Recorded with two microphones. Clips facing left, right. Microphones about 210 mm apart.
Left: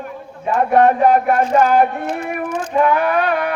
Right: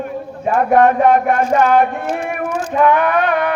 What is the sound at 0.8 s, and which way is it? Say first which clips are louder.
Speech: right 1 dB; 35° left (ahead or behind).